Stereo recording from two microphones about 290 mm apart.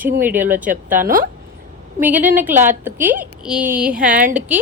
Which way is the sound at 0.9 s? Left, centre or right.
Right.